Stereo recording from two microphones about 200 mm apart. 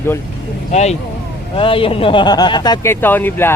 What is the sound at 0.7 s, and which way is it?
Speech, 35° left (ahead or behind).